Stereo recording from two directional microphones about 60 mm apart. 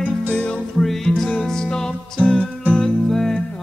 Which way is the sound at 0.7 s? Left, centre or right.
Centre.